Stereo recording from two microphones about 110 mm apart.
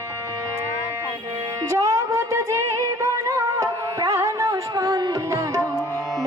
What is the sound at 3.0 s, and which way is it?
Music, 30° right (ahead or behind).